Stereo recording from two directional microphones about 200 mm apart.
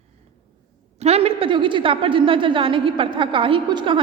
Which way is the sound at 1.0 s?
30° right (ahead or behind).